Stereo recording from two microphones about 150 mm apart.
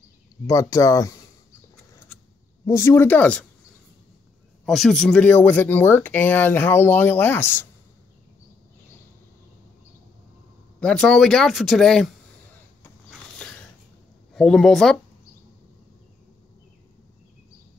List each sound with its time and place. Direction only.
0.5 s speech: 20° left (ahead or behind)
2.6 s speech: 20° left (ahead or behind)
4.6 s speech: centre (ahead or behind)
10.8 s speech: 5° left (ahead or behind)
13.1 s mechanisms: 10° left (ahead or behind)
14.3 s speech: 5° left (ahead or behind)